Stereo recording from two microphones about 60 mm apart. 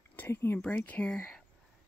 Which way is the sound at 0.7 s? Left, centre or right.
Left.